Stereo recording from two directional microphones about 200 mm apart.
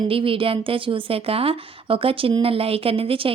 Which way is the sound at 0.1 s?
25° right (ahead or behind).